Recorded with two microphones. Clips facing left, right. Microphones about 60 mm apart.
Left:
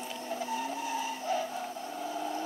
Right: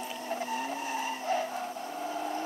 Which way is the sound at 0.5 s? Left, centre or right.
Right.